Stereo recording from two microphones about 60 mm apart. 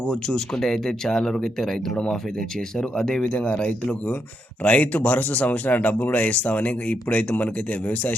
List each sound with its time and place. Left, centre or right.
0.0 s speech: centre; by 8.1 s left